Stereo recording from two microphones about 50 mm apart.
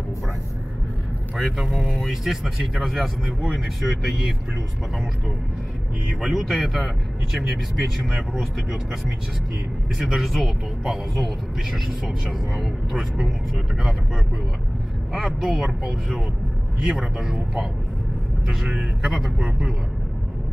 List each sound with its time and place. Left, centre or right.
1.3 s speech: centre
6.2 s speech: centre
9.9 s speech: centre
10.2 s speech: centre
13.7 s speech: centre
15.2 s speech: centre